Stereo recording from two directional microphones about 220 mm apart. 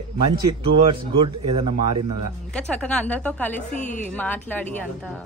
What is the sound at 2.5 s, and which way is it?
A woman's voice, 5° left (ahead or behind).